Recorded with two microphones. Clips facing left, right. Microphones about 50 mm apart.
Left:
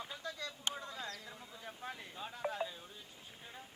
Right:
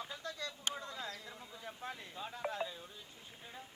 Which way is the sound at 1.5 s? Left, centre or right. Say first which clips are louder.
Right 1 dB; centre.